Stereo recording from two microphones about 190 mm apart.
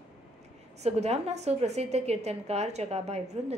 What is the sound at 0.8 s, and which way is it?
A woman's voice, 35° right (ahead or behind).